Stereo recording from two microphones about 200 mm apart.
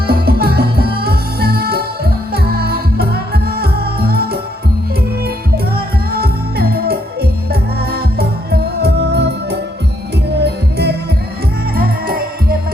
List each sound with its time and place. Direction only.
0.1 s music: 50° right (ahead or behind)
5.7 s music: 50° right (ahead or behind)